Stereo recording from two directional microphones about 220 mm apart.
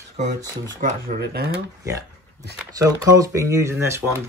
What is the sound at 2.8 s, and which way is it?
Speech, 15° right (ahead or behind).